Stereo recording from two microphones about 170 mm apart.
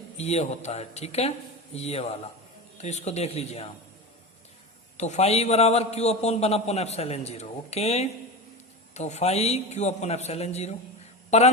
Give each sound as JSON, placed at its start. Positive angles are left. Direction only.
{"t": 0.2, "sound": "a man's voice", "side_deg": 40}
{"t": 4.9, "sound": "a man's voice", "side_deg": 40}